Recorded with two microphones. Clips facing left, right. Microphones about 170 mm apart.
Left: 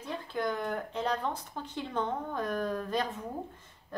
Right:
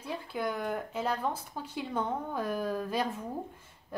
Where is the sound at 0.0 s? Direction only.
10° right (ahead or behind).